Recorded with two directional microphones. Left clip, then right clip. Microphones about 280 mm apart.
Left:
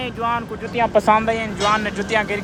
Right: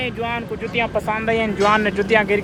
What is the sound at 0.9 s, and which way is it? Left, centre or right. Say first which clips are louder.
Speech: left 7 dB; left.